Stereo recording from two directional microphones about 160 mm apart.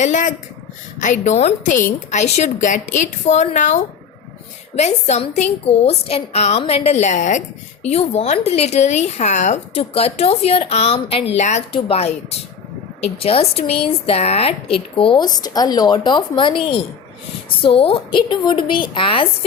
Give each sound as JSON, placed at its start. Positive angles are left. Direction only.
{"t": 0.0, "sound": "a woman's voice", "side_deg": 50}